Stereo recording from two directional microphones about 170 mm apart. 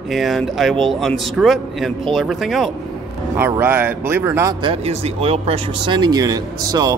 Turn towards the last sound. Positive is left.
turn(degrees=-20)  # may be behind; listen again after turning